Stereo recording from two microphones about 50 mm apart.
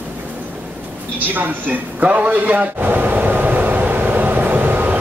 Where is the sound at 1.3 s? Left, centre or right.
Right.